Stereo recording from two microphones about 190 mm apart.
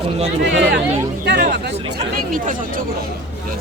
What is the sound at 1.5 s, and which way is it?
Speech, 60° right (ahead or behind).